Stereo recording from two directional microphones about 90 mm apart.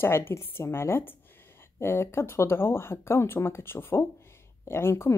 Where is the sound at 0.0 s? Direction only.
25° left (ahead or behind).